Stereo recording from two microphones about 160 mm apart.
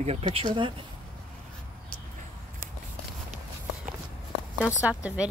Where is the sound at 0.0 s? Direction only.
40° right (ahead or behind).